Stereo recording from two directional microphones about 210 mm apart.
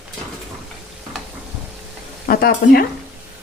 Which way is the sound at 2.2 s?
45° left (ahead or behind).